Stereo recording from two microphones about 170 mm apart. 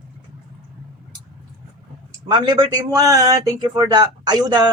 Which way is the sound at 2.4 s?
25° right (ahead or behind).